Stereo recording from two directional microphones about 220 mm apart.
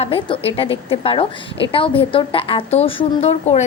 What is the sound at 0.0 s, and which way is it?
A woman's voice, 25° left (ahead or behind).